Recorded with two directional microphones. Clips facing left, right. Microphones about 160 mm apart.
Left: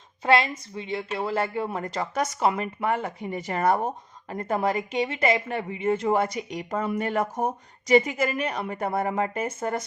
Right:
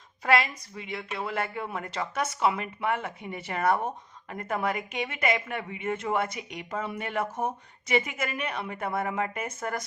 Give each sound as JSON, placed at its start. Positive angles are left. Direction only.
{"t": 0.2, "sound": "a woman's voice", "side_deg": 25}